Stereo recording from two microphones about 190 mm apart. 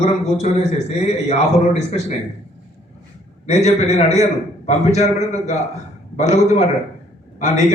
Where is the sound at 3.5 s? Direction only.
35° left (ahead or behind).